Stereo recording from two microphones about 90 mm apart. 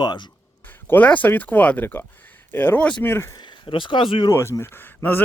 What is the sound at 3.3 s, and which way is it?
Speech, 60° left (ahead or behind).